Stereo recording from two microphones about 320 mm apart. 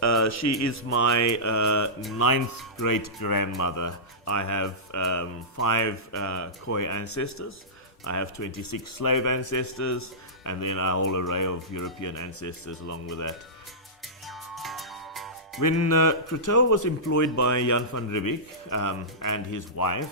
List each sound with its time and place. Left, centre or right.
0.0 s speech: left
2.2 s speech: left
3.6 s speech: left
11.9 s speech: left
14.3 s music: centre
15.9 s speech: left